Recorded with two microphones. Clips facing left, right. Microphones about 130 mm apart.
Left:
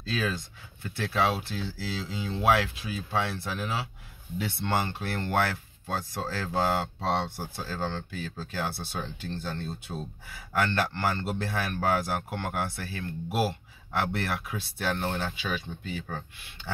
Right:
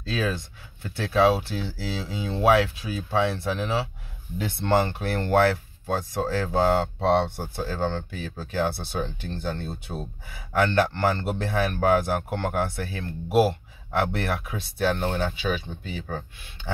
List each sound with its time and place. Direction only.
0.1 s speech: 25° right (ahead or behind)